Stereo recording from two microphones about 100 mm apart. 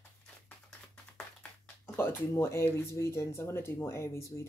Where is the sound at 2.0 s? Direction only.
25° left (ahead or behind).